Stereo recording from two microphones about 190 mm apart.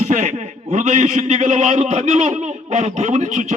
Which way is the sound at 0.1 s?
40° right (ahead or behind).